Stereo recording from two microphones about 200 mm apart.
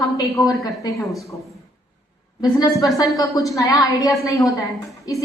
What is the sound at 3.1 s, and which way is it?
Speech, 15° left (ahead or behind).